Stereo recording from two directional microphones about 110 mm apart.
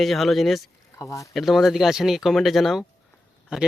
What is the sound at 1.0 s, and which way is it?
Speech, 30° left (ahead or behind).